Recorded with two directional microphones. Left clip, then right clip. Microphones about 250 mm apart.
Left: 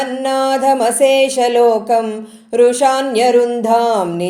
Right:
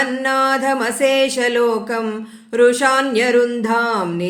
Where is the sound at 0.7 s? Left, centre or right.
Centre.